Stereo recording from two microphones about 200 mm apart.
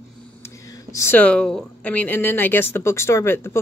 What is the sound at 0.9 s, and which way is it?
A woman's voice, 10° left (ahead or behind).